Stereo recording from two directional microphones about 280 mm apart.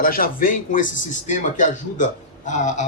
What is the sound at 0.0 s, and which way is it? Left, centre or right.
A man's voice, left.